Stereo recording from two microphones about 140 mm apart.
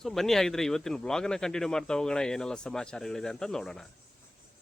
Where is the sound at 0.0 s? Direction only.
Centre (ahead or behind).